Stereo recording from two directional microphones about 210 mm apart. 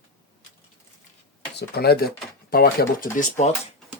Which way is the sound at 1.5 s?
50° left (ahead or behind).